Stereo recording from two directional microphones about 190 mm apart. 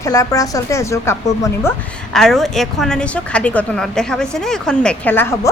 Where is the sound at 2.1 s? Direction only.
Centre (ahead or behind).